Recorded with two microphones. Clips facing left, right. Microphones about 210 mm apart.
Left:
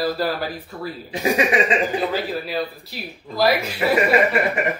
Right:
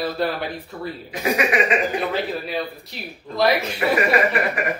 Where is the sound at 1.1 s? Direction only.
30° left (ahead or behind).